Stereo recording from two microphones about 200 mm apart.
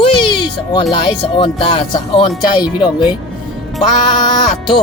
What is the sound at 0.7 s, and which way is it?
Speech, 20° left (ahead or behind).